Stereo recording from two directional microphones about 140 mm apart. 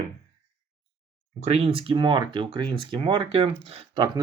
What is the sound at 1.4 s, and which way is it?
Speech, 50° right (ahead or behind).